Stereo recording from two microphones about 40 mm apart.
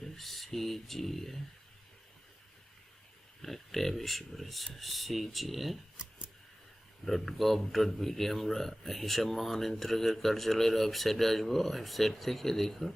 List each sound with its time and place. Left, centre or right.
0.0 s speech: centre
3.4 s speech: centre
6.0 s scissors: right
7.0 s speech: centre